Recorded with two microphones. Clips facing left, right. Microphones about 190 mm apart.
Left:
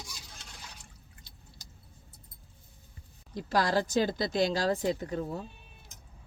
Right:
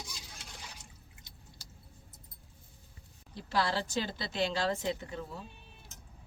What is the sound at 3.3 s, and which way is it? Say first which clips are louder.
Speech: left 5 dB; 45° left (ahead or behind).